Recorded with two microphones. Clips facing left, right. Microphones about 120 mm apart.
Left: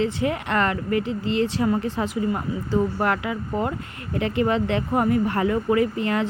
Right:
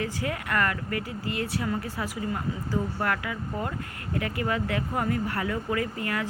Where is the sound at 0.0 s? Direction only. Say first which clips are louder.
Left 7 dB; 20° left (ahead or behind).